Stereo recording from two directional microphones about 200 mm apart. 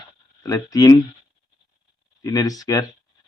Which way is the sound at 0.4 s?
15° left (ahead or behind).